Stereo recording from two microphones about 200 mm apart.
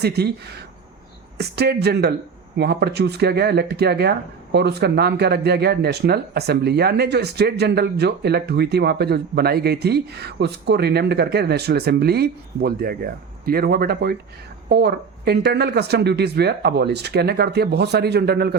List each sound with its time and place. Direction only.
0.0 s speech: 55° right (ahead or behind)